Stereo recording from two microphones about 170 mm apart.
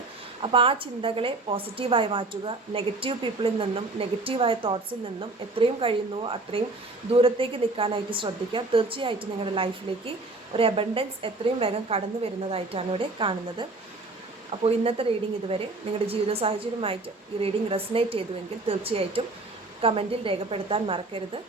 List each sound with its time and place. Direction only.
0.4 s a woman's voice: 30° right (ahead or behind)
16.0 s a woman's voice: 35° right (ahead or behind)